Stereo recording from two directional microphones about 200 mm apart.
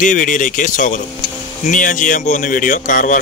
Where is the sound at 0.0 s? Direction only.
40° left (ahead or behind).